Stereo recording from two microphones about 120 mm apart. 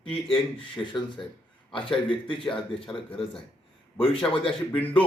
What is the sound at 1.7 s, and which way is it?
Speech, 45° left (ahead or behind).